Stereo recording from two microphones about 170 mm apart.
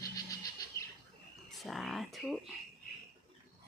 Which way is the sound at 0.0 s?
20° left (ahead or behind).